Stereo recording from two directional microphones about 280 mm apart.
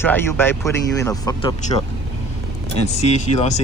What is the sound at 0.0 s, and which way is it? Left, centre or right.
Speech, centre.